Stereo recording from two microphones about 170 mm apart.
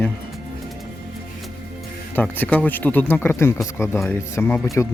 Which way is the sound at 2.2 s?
10° left (ahead or behind).